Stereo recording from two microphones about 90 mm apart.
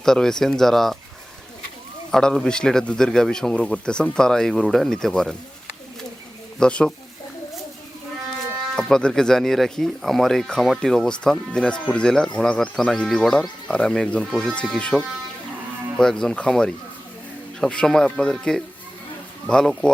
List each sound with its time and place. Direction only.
0.0 s speech: 5° left (ahead or behind)
2.0 s speech: 5° left (ahead or behind)
6.6 s speech: 10° left (ahead or behind)
8.7 s speech: 10° left (ahead or behind)